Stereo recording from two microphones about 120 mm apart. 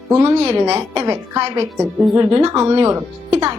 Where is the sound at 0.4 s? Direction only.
20° right (ahead or behind).